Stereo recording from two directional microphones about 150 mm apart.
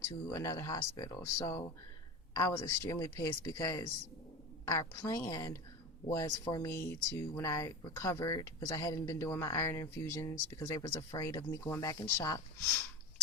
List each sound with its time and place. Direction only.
0.3 s speech: 20° left (ahead or behind)